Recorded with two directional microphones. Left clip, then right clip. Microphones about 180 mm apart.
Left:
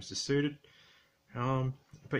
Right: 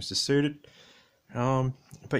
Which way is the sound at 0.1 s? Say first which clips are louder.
Right 6 dB; 45° right (ahead or behind).